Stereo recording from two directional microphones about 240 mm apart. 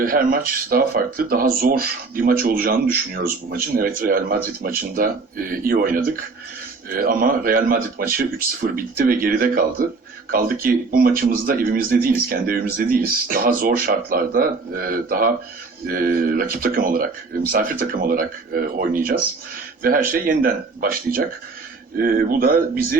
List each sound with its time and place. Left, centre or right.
0.0 s speech: right